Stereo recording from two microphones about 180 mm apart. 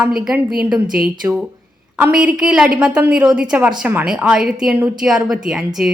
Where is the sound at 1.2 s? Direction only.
10° right (ahead or behind).